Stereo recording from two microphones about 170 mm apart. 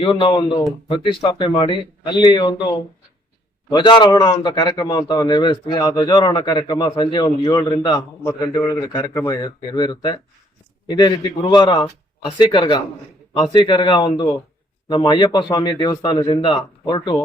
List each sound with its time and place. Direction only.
0.0 s a man's voice: 30° left (ahead or behind)
8.2 s a man's voice: 15° left (ahead or behind)
8.5 s a man's voice: 25° left (ahead or behind)